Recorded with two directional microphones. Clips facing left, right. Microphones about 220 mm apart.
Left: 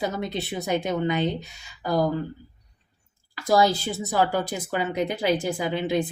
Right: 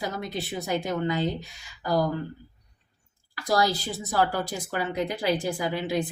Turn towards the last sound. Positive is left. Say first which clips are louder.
# left 3 dB
turn(degrees=20)  # may be behind; listen again after turning